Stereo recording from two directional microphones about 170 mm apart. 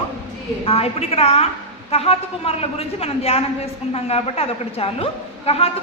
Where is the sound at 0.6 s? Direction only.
35° left (ahead or behind).